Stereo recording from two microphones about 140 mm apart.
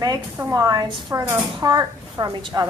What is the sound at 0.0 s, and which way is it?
A woman's voice, 25° right (ahead or behind).